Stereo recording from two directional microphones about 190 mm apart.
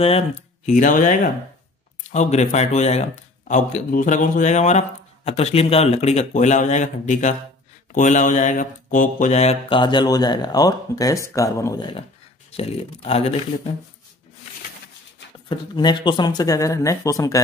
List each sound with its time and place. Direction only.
0.7 s speech: 40° left (ahead or behind); by 12.0 s 20° left (ahead or behind)
12.4 s speech: 30° left (ahead or behind)
15.4 s speech: 25° left (ahead or behind)